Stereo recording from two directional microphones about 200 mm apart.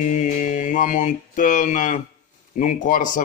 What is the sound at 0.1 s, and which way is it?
Mantra, 40° left (ahead or behind).